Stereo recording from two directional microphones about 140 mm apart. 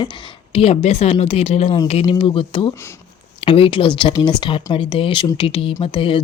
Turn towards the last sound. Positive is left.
turn(degrees=40)  # may be behind; listen again after turning